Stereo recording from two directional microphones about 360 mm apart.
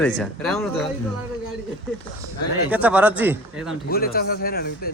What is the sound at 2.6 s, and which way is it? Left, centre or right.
A man's voice, centre.